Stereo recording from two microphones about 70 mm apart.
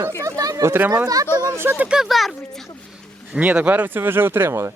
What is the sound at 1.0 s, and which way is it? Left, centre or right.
Speech, right.